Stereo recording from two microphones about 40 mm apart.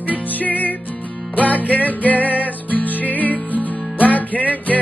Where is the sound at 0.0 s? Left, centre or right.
Left.